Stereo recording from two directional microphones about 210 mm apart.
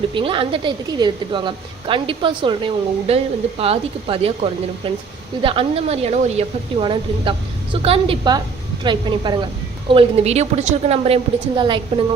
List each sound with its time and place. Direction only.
0.1 s a woman's voice: 25° right (ahead or behind)